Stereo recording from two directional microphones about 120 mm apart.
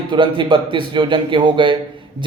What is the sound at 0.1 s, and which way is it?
A man's voice, 45° right (ahead or behind).